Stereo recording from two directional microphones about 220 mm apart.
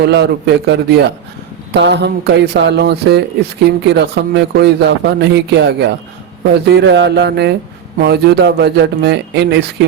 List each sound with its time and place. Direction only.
0.0 s speech: 50° right (ahead or behind)